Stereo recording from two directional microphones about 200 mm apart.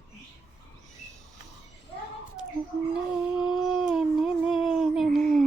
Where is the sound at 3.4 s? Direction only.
Centre (ahead or behind).